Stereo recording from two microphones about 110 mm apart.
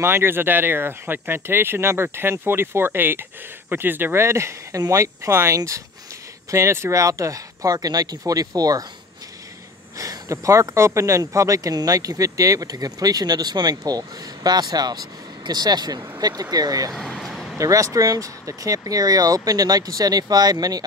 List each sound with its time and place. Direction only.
0.0 s speech: 20° right (ahead or behind)
9.9 s speech: 30° right (ahead or behind)
16.9 s a sound: centre (ahead or behind)
17.6 s speech: 30° right (ahead or behind)